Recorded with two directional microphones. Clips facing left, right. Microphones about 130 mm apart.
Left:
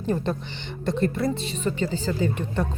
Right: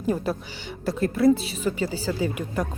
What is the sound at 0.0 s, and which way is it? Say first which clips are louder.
Speech: even; 5° right (ahead or behind).